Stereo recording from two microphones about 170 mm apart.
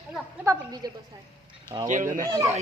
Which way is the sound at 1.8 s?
50° right (ahead or behind).